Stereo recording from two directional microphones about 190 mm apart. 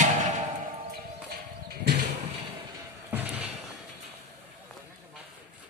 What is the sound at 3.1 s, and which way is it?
Slam, 5° right (ahead or behind).